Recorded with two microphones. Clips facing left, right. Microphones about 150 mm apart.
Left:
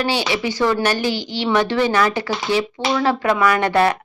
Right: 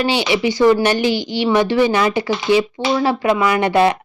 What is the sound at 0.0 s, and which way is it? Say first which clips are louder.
Speech: right 4 dB; 15° right (ahead or behind).